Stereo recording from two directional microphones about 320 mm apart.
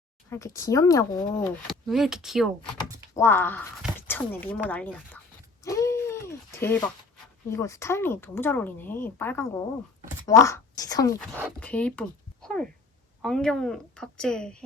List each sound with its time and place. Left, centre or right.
0.3 s a woman's voice: centre
5.6 s a sound: centre
7.5 s a woman's voice: centre